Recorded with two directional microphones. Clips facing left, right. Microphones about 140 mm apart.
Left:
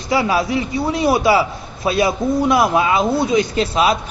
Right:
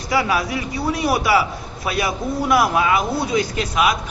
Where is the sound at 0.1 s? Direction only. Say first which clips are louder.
Left 3 dB; 25° left (ahead or behind).